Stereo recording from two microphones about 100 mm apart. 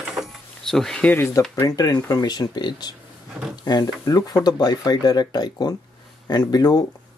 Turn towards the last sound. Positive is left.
turn(degrees=40)  # may be behind; listen again after turning